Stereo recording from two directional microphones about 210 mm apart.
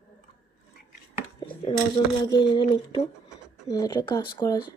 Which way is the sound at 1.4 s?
25° left (ahead or behind).